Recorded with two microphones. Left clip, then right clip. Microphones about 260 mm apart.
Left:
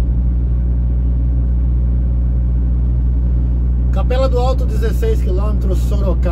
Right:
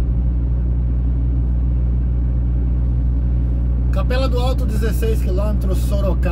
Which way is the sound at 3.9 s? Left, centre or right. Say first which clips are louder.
Left 5 dB; centre.